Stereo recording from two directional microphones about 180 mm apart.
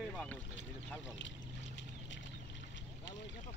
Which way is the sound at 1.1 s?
90° left.